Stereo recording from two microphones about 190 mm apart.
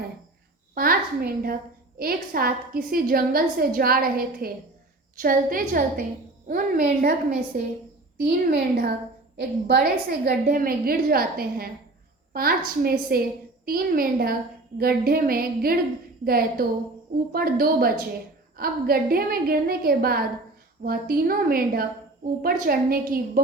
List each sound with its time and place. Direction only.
0.7 s a child's voice: 50° right (ahead or behind)